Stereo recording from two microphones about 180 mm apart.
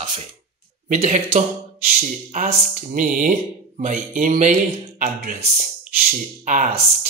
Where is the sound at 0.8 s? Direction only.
45° right (ahead or behind).